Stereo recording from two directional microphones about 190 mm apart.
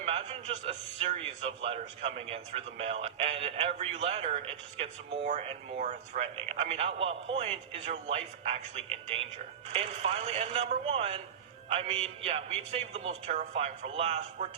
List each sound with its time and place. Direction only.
0.0 s a man's voice: 30° right (ahead or behind)